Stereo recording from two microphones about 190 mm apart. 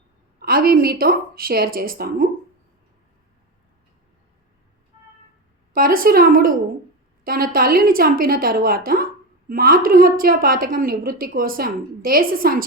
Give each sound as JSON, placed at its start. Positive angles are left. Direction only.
{"t": 0.3, "sound": "a woman's voice", "side_deg": -50}
{"t": 5.7, "sound": "a woman's voice", "side_deg": -50}